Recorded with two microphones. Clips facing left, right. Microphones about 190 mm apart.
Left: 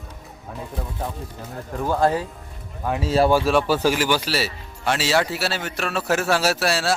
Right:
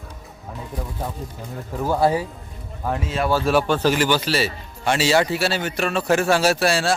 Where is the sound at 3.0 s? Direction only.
30° left (ahead or behind).